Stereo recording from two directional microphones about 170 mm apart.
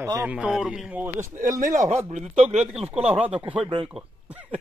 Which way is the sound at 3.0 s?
5° right (ahead or behind).